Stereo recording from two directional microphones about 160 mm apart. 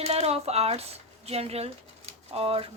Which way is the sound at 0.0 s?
40° right (ahead or behind).